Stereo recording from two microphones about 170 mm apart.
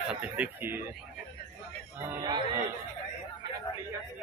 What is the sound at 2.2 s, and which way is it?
Speech, 25° right (ahead or behind).